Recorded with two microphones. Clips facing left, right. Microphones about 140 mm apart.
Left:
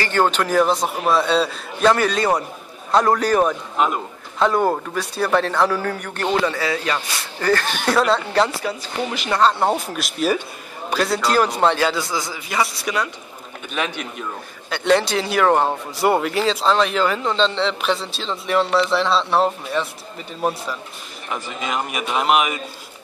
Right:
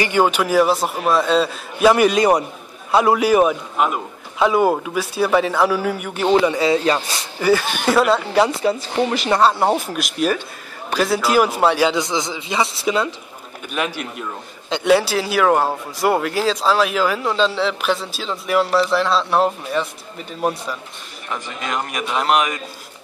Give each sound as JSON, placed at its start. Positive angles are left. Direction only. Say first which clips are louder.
{"t": 0.0, "sound": "a man's voice", "louder": "right 2 dB", "side_deg": -10}
{"t": 6.5, "sound": "a man's voice", "louder": "right 6 dB", "side_deg": -25}
{"t": 7.3, "sound": "speech", "louder": "right 3 dB", "side_deg": -10}
{"t": 8.5, "sound": "a man's voice", "louder": "right 6 dB", "side_deg": -20}
{"t": 9.1, "sound": "speech", "louder": "right 5 dB", "side_deg": -35}
{"t": 9.4, "sound": "a man's voice", "louder": "even", "side_deg": -5}
{"t": 13.7, "sound": "speech", "louder": "right 2 dB", "side_deg": -5}
{"t": 21.3, "sound": "speech", "louder": "even", "side_deg": 5}